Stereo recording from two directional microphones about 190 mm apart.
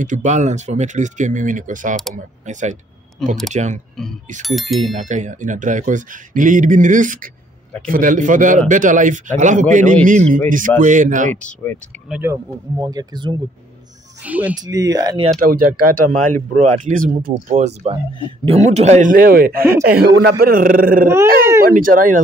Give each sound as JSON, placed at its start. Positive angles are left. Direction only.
{"t": 0.0, "sound": "a man's voice", "side_deg": -40}
{"t": 3.2, "sound": "speech", "side_deg": 0}
{"t": 3.5, "sound": "a man's voice", "side_deg": -40}
{"t": 4.4, "sound": "speech", "side_deg": 0}
{"t": 4.9, "sound": "a man's voice", "side_deg": -40}
{"t": 11.3, "sound": "speech", "side_deg": 10}
{"t": 12.1, "sound": "speech", "side_deg": -10}
{"t": 14.2, "sound": "speech", "side_deg": -10}
{"t": 14.6, "sound": "speech", "side_deg": -20}
{"t": 15.5, "sound": "a man's voice", "side_deg": -50}